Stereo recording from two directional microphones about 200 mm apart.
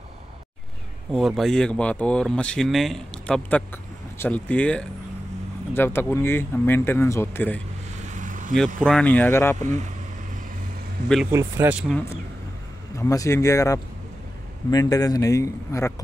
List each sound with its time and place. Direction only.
1.1 s speech: centre (ahead or behind)
8.1 s vehicle: 40° right (ahead or behind)
8.5 s speech: 5° left (ahead or behind)
9.6 s speech: 35° right (ahead or behind)
11.3 s speech: 10° right (ahead or behind)
11.9 s speech: 10° left (ahead or behind)